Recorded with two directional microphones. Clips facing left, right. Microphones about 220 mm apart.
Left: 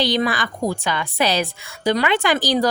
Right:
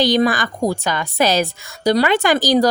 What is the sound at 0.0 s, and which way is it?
A woman's voice, 45° right (ahead or behind).